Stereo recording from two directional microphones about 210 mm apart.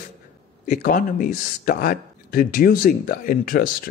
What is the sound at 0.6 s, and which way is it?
Speech, 35° left (ahead or behind).